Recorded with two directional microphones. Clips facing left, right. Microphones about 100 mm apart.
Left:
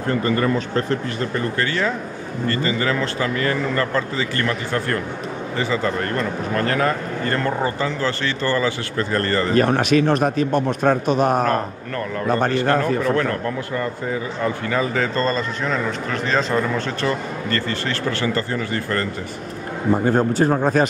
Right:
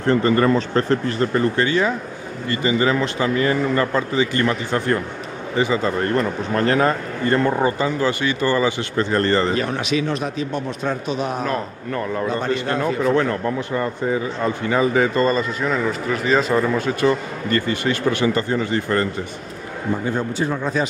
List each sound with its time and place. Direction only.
0.4 s speech: 35° right (ahead or behind)
1.6 s a man's voice: 15° right (ahead or behind)
9.6 s a man's voice: 50° left (ahead or behind)
14.4 s a man's voice: 20° right (ahead or behind)
20.1 s a man's voice: 45° left (ahead or behind)